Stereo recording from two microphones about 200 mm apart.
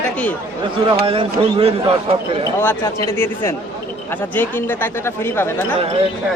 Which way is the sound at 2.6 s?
10° left (ahead or behind).